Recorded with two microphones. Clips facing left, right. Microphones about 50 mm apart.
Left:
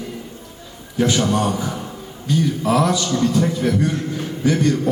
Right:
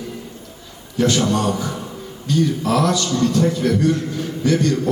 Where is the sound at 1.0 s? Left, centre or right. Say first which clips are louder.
Even; centre.